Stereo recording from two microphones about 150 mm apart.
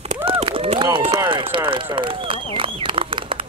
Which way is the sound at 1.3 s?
35° right (ahead or behind).